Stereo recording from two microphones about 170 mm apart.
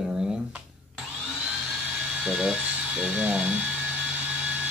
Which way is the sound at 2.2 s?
5° right (ahead or behind).